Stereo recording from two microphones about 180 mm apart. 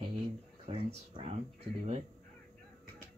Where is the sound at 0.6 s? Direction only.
35° right (ahead or behind).